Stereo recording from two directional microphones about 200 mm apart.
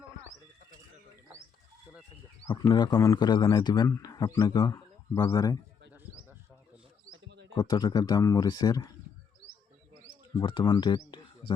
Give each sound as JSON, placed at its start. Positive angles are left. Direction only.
{"t": 2.5, "sound": "a man's voice", "side_deg": 20}
{"t": 7.1, "sound": "a sound", "side_deg": -65}
{"t": 7.5, "sound": "a man's voice", "side_deg": 20}
{"t": 10.3, "sound": "speech", "side_deg": 25}